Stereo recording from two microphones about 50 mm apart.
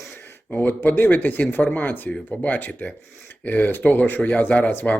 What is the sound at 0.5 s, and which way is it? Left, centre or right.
Speech, left.